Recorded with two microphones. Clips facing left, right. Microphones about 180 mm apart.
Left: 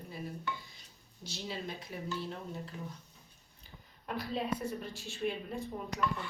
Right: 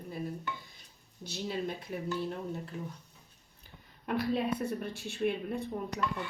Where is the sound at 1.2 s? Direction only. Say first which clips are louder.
Right 5 dB; 55° right (ahead or behind).